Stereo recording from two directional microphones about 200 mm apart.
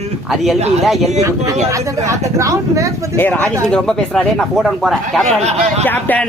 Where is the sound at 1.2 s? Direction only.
15° right (ahead or behind).